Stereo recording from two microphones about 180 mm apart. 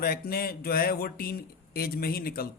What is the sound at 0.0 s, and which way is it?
Speech, 55° left (ahead or behind).